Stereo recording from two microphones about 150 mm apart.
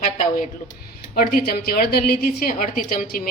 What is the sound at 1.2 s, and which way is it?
A woman's voice, 85° left.